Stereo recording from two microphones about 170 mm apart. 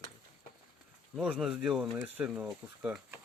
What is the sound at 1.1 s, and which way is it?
Speech, 5° right (ahead or behind).